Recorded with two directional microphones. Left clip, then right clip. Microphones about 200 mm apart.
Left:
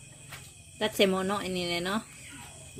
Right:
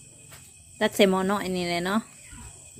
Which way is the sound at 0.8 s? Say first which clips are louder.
Right 5 dB; 25° right (ahead or behind).